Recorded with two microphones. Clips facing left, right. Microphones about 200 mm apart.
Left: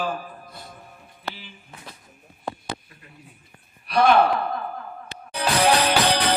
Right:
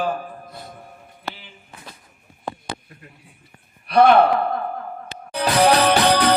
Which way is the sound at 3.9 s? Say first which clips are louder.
Right 4 dB; 55° right (ahead or behind).